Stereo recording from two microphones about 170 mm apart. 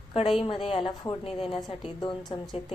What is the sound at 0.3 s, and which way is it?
A woman's voice, 30° left (ahead or behind).